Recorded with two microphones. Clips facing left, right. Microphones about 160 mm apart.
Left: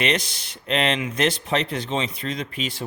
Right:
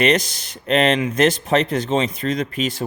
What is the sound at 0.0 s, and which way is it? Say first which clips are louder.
A man's voice: right 6 dB; 45° right (ahead or behind).